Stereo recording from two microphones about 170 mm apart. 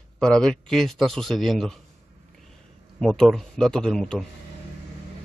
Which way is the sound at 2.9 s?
Centre (ahead or behind).